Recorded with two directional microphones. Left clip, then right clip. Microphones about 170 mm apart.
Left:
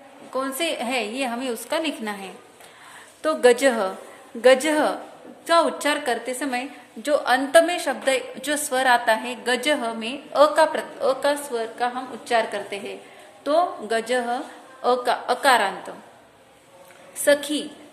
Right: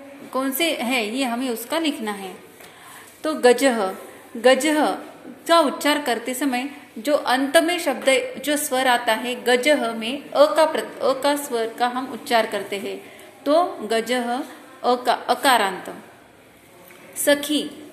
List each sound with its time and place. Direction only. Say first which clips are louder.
0.3 s a woman's voice: right 3 dB; 10° left (ahead or behind)
3.2 s a woman's voice: right 1 dB; 25° left (ahead or behind)
17.2 s a woman's voice: even; 15° left (ahead or behind)